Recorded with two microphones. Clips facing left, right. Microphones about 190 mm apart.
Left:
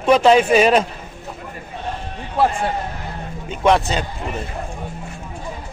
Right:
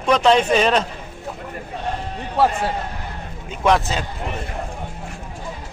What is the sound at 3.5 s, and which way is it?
Speech, centre (ahead or behind).